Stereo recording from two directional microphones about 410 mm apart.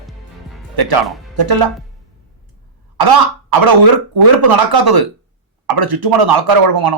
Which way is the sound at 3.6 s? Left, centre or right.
Right.